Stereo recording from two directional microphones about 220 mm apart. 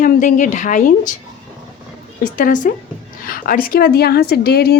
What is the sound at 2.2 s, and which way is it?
A woman's voice, 35° left (ahead or behind).